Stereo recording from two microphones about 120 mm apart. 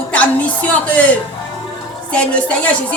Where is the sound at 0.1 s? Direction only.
10° left (ahead or behind).